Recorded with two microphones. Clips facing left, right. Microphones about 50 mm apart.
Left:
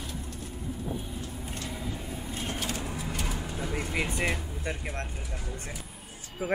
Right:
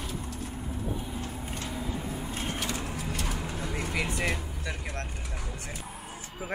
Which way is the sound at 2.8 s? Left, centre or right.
Centre.